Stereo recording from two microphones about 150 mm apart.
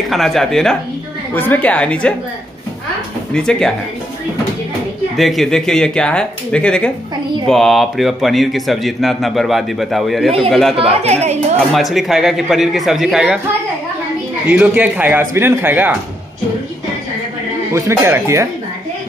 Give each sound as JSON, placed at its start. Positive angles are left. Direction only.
{"t": 0.1, "sound": "a woman's voice", "side_deg": 0}
{"t": 3.3, "sound": "speech", "side_deg": 5}
{"t": 5.1, "sound": "speech", "side_deg": 0}
{"t": 10.8, "sound": "speech", "side_deg": -45}
{"t": 11.7, "sound": "speech", "side_deg": 0}
{"t": 14.5, "sound": "a man's voice", "side_deg": -10}
{"t": 17.7, "sound": "speech", "side_deg": -15}